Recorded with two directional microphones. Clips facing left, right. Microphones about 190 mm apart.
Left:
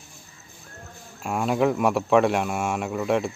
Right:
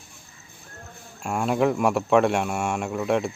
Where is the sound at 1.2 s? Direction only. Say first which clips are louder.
Even; centre (ahead or behind).